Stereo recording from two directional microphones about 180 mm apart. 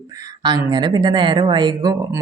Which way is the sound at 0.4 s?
25° right (ahead or behind).